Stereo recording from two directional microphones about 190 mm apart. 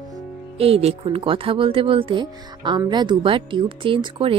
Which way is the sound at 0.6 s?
30° right (ahead or behind).